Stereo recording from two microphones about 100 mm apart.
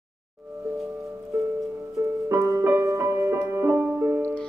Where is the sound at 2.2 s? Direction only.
30° right (ahead or behind).